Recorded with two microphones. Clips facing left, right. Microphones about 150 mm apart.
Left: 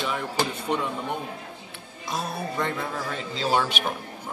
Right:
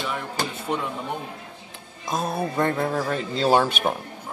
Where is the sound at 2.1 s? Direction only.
50° right (ahead or behind).